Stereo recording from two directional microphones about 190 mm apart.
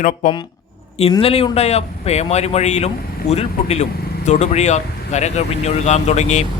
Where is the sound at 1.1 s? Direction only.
30° left (ahead or behind).